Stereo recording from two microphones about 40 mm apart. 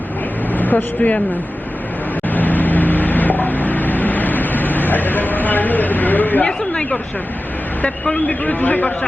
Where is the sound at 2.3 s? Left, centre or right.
Left.